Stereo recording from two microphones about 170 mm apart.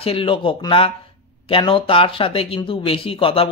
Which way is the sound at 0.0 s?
35° left (ahead or behind).